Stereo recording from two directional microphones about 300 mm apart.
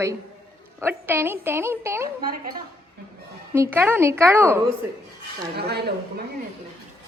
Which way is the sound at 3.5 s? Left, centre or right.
Centre.